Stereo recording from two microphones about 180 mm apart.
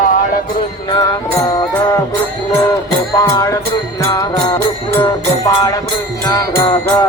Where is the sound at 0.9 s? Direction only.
20° left (ahead or behind).